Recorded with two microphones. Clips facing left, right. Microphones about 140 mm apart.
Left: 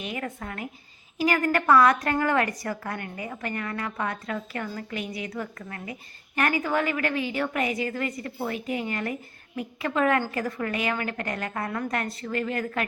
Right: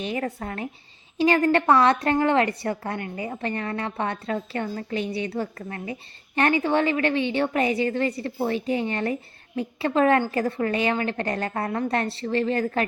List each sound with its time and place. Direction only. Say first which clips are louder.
0.0 s a woman's voice: right 5 dB; 35° right (ahead or behind)